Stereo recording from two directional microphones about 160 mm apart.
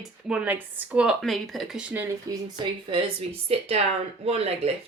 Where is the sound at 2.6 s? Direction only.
35° right (ahead or behind).